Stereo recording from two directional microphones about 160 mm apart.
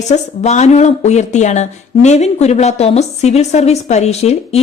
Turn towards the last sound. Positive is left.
turn(degrees=40)  # may be behind; listen again after turning